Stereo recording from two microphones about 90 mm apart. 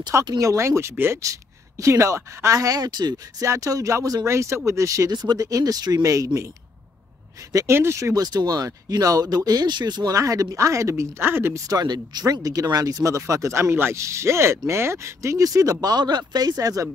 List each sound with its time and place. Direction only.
0.2 s speech: 40° right (ahead or behind)
3.4 s speech: 35° right (ahead or behind)
7.5 s speech: 30° right (ahead or behind); by 10.1 s 50° right (ahead or behind)
10.1 s speech: 40° right (ahead or behind)
11.7 s speech: 50° right (ahead or behind)